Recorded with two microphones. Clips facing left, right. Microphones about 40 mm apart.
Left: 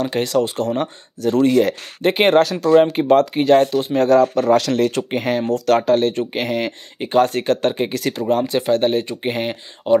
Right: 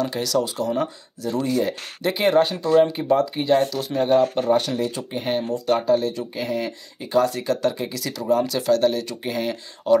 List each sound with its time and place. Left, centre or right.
0.0 s speech: left
2.0 s speech: left
2.3 s speech: left
3.9 s speech: left
9.9 s speech: left